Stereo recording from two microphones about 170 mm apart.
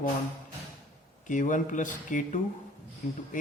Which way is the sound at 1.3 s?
50° left (ahead or behind).